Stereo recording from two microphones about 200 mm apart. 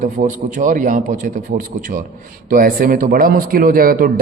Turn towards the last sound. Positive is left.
turn(degrees=-45)  # may be behind; listen again after turning